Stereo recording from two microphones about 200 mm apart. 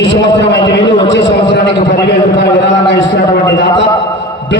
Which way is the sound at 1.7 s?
60° left (ahead or behind).